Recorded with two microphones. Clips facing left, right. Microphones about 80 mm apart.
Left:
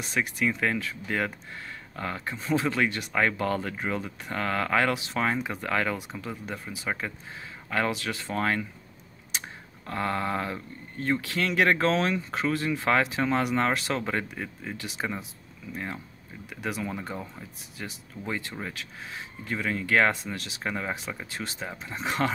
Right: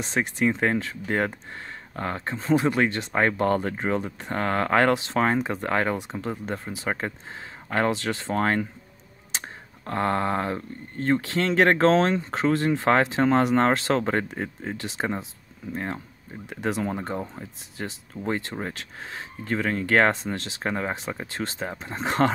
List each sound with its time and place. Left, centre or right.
0.0 s speech: right
2.5 s speech: right
18.6 s speech: right
20.2 s speech: right
20.9 s speech: right
21.2 s speech: right